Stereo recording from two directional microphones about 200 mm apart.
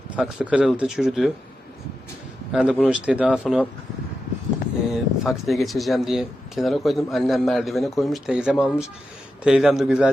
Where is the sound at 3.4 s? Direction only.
5° left (ahead or behind).